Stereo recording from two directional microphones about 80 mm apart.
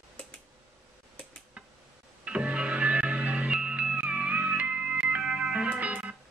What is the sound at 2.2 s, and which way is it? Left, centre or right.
Music, centre.